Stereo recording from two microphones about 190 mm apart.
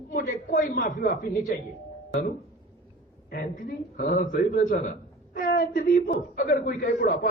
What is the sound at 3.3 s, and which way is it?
A man's voice, 50° left (ahead or behind).